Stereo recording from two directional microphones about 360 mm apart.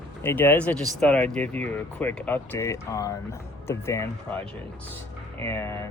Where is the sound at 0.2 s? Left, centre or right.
Centre.